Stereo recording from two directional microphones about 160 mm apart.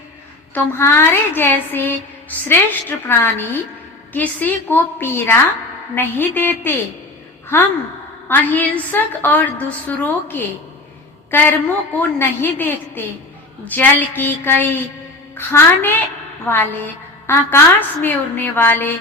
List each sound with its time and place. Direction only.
0.5 s a woman's voice: 15° left (ahead or behind)
3.1 s a woman's voice: 15° left (ahead or behind)